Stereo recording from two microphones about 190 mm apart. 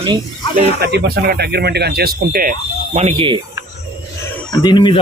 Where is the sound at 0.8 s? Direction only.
60° right (ahead or behind).